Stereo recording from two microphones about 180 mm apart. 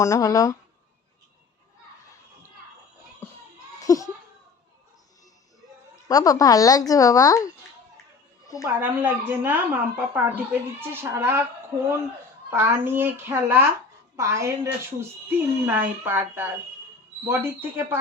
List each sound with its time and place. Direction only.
0.0 s speech: 20° left (ahead or behind)
3.8 s a child's voice: 20° left (ahead or behind)
6.1 s speech: 20° left (ahead or behind)
8.6 s a woman's voice: 10° right (ahead or behind)
12.5 s a woman's voice: 10° right (ahead or behind)